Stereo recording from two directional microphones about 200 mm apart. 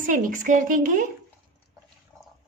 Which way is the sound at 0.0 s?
40° right (ahead or behind).